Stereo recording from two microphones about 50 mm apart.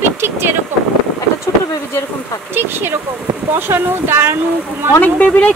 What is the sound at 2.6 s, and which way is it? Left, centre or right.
Speech, right.